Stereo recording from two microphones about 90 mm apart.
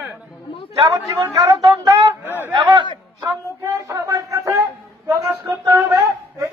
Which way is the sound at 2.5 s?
60° right (ahead or behind).